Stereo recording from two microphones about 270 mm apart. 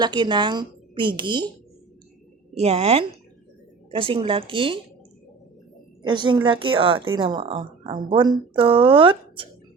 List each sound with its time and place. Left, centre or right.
0.0 s speech: centre
2.6 s speech: right
6.0 s speech: centre